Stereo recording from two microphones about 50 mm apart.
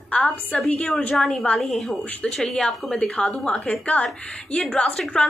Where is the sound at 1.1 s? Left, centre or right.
Centre.